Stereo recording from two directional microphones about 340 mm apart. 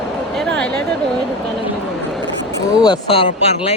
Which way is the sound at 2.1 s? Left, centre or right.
Centre.